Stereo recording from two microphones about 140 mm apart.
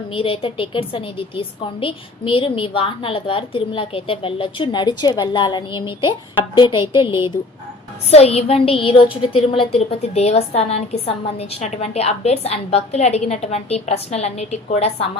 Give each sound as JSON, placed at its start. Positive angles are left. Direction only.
{"t": 0.1, "sound": "a woman's voice", "side_deg": 40}
{"t": 8.1, "sound": "a woman's voice", "side_deg": 45}